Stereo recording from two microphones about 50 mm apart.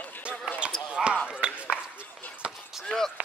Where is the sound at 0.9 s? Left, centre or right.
Right.